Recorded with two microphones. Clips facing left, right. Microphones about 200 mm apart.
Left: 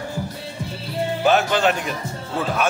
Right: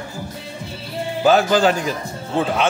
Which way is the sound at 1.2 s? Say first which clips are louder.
Right 4 dB; 35° right (ahead or behind).